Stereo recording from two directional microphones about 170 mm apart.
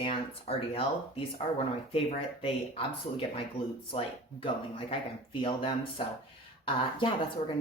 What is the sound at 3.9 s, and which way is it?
Speech, 30° left (ahead or behind).